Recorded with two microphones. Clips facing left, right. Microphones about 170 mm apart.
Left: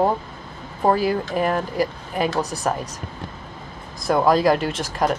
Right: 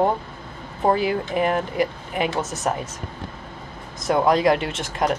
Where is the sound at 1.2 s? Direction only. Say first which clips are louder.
Even; 20° right (ahead or behind).